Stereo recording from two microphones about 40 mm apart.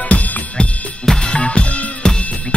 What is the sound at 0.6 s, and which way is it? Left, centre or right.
Drum kit, left.